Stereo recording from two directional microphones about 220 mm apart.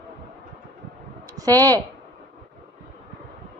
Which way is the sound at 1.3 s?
15° right (ahead or behind).